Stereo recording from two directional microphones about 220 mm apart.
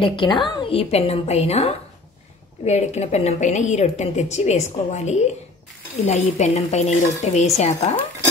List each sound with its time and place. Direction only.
0.0 s a woman's voice: 20° left (ahead or behind)